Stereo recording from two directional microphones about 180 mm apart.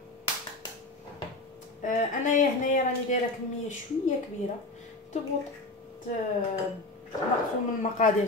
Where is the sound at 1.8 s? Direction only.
45° left (ahead or behind).